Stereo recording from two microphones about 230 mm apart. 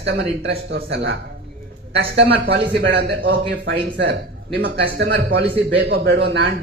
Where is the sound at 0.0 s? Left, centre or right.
Right.